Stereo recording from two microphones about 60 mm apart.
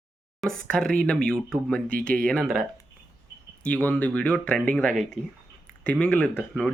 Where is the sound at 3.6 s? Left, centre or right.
Left.